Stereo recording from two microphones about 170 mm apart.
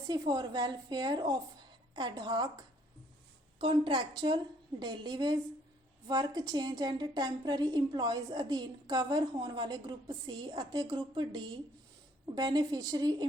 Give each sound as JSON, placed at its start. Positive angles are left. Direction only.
{"t": 0.1, "sound": "a woman's voice", "side_deg": -25}